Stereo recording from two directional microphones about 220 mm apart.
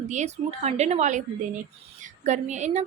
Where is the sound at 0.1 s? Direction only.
30° right (ahead or behind).